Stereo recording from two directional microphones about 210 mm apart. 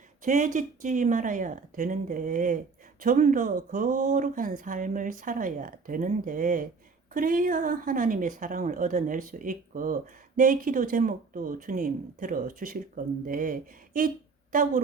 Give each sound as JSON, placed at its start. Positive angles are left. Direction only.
{"t": 0.3, "sound": "a woman's voice", "side_deg": -35}